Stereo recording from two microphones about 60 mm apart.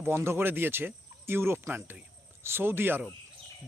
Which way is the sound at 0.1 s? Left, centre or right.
Right.